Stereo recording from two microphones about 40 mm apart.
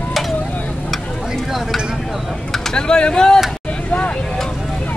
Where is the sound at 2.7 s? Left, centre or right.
Left.